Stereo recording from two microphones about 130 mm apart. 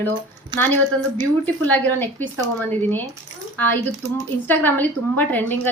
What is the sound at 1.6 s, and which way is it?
A woman's voice, 15° left (ahead or behind).